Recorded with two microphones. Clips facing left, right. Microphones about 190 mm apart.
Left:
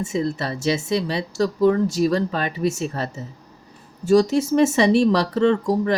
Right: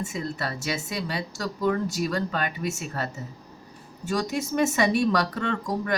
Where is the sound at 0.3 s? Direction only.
25° left (ahead or behind).